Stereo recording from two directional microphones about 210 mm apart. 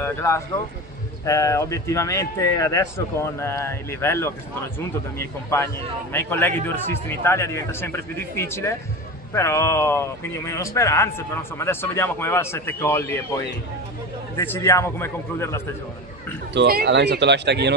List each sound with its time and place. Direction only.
0.0 s a man's voice: 10° left (ahead or behind)
16.5 s speech: 50° right (ahead or behind)